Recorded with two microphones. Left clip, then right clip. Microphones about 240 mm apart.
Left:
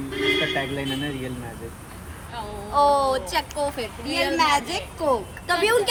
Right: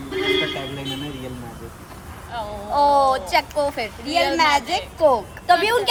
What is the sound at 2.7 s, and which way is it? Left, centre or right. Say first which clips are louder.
A child's voice: right 3 dB; right.